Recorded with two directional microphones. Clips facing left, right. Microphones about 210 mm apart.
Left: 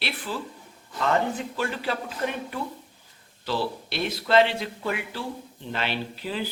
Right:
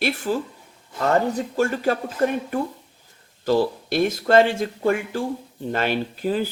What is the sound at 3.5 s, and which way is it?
Speech, 45° right (ahead or behind).